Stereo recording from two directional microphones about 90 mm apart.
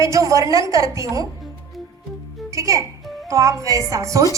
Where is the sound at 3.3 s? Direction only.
35° right (ahead or behind).